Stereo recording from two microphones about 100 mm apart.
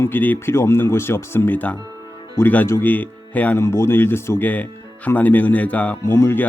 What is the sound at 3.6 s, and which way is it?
Speech, 25° left (ahead or behind).